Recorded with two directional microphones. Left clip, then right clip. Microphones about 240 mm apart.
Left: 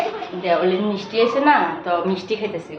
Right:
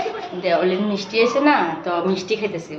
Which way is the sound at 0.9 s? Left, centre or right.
Centre.